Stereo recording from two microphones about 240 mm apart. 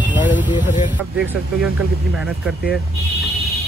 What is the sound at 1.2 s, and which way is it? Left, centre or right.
Speech, centre.